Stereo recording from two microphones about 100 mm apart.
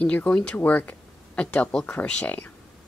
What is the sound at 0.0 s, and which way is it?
Speech, 15° left (ahead or behind).